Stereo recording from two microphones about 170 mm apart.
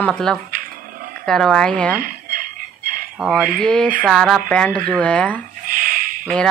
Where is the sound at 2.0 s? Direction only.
55° right (ahead or behind).